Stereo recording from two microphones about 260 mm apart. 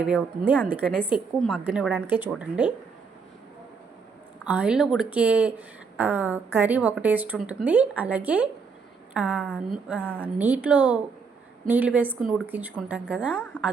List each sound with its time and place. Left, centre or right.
0.0 s speech: centre
4.4 s speech: centre